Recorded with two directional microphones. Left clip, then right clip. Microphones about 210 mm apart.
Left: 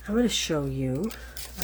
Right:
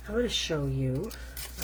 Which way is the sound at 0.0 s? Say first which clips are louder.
Left 3 dB; 55° left (ahead or behind).